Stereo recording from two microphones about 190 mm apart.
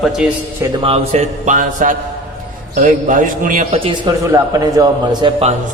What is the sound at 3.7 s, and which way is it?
A man's voice, 25° right (ahead or behind).